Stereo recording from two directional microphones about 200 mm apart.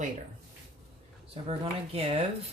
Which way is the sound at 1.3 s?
30° right (ahead or behind).